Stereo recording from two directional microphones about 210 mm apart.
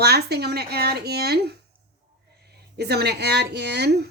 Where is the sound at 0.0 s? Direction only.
50° right (ahead or behind).